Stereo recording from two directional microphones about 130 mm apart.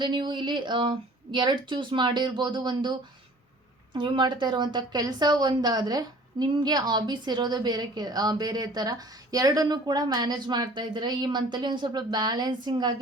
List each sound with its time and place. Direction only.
0.0 s a woman's voice: 35° right (ahead or behind)
3.9 s a woman's voice: 35° right (ahead or behind)